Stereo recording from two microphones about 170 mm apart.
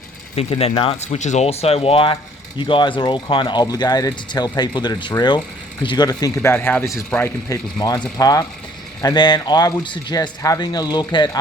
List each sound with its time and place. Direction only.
0.3 s speech: 35° left (ahead or behind); by 7.3 s 5° left (ahead or behind)
7.5 s speech: 25° left (ahead or behind)